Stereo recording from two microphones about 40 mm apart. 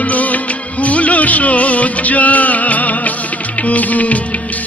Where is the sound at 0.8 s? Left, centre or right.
Left.